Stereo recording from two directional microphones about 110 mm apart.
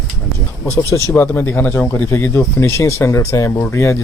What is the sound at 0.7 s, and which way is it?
Speech, 25° left (ahead or behind).